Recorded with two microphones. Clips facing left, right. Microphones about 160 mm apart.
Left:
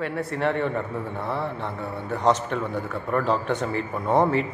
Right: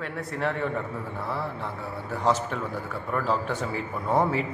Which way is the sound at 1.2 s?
25° left (ahead or behind).